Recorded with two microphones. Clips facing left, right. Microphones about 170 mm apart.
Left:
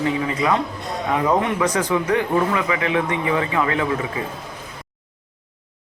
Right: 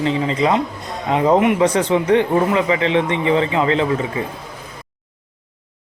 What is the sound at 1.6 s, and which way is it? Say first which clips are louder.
Speech: right 4 dB; 30° right (ahead or behind).